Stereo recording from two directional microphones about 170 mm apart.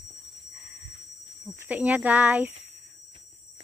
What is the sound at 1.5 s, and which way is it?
Speech, 10° right (ahead or behind).